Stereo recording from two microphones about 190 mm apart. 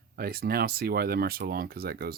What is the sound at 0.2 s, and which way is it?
Speech, 55° right (ahead or behind).